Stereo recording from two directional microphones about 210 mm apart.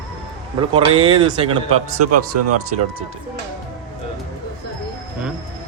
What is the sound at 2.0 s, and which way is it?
Speech, 90° right.